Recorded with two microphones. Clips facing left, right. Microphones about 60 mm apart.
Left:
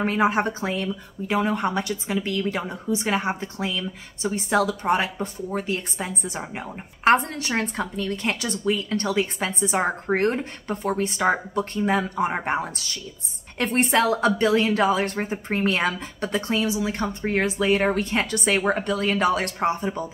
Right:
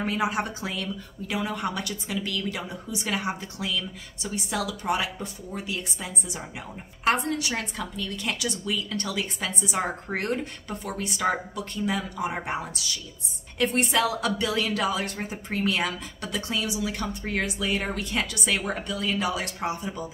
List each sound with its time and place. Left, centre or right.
0.0 s speech: left